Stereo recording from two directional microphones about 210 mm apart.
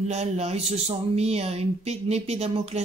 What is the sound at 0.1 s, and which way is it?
Speech, 30° right (ahead or behind).